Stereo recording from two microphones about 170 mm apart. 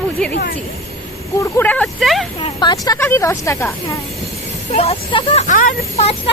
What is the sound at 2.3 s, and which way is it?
Speech, 25° left (ahead or behind).